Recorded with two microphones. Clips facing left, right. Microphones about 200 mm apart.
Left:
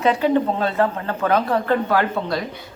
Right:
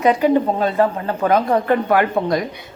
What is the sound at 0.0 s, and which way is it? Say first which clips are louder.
Speech: right 3 dB; 15° right (ahead or behind).